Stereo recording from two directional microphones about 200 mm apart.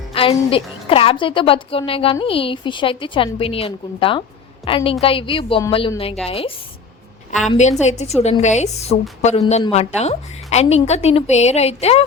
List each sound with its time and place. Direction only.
0.1 s a woman's voice: 25° left (ahead or behind)
7.5 s a woman's voice: 35° left (ahead or behind)